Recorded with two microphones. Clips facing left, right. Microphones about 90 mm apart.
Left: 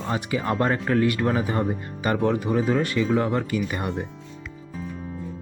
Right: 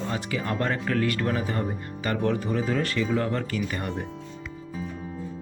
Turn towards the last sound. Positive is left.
turn(degrees=15)  # may be behind; listen again after turning